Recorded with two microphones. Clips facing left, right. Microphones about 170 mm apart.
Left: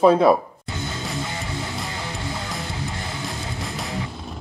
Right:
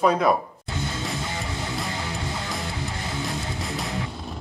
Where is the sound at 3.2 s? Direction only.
Centre (ahead or behind).